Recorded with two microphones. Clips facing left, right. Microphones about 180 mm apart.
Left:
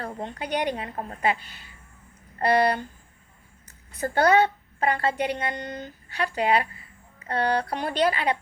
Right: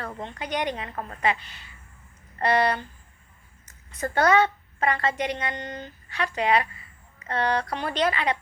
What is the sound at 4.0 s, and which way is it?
A woman's voice, 35° left (ahead or behind).